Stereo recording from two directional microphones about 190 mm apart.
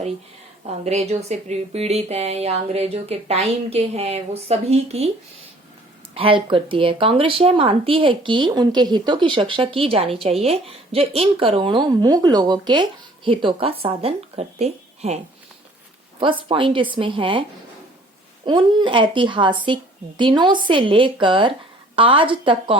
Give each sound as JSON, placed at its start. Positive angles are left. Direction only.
{"t": 0.6, "sound": "speech", "side_deg": -35}
{"t": 6.1, "sound": "speech", "side_deg": -30}
{"t": 16.5, "sound": "speech", "side_deg": -25}
{"t": 18.4, "sound": "speech", "side_deg": -25}